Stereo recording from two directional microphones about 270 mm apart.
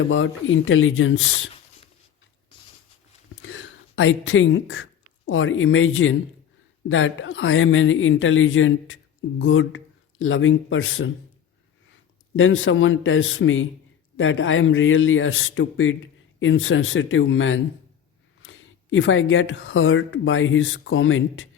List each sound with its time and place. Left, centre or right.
0.0 s speech: left
3.4 s speech: left
12.4 s speech: left